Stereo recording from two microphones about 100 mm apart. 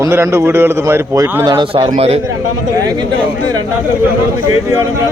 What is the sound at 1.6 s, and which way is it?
Speech, 55° right (ahead or behind).